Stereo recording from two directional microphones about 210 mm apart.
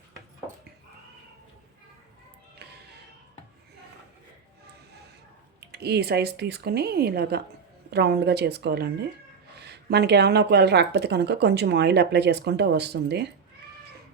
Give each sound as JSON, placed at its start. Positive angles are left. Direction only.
{"t": 5.5, "sound": "speech", "side_deg": -50}